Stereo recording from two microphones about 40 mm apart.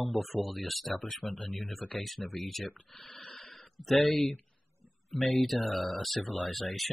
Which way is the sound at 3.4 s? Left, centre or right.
Left.